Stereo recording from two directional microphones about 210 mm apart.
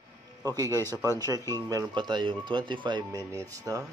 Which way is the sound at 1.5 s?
15° right (ahead or behind).